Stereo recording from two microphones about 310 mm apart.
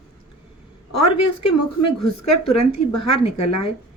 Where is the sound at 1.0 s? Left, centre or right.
Left.